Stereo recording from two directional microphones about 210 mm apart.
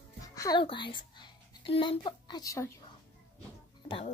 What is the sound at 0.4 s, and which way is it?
Speech, 20° left (ahead or behind).